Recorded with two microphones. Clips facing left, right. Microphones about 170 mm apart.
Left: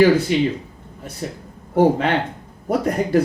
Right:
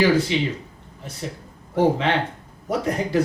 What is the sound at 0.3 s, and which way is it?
Speech, 50° left (ahead or behind).